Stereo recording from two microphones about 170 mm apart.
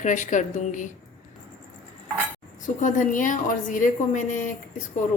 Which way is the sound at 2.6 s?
50° left (ahead or behind).